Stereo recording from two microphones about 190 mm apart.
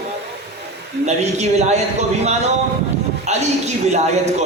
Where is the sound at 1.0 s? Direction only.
35° right (ahead or behind).